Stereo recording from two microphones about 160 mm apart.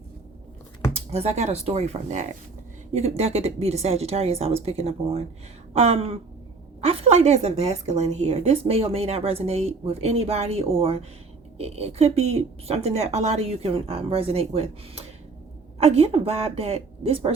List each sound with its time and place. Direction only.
0.9 s a woman's voice: 40° right (ahead or behind)